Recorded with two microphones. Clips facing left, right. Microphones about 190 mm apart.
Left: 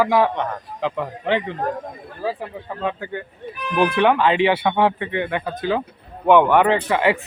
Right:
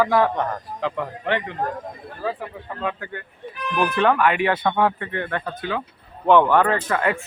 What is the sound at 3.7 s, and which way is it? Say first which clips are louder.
Speech: left 2 dB; 15° left (ahead or behind).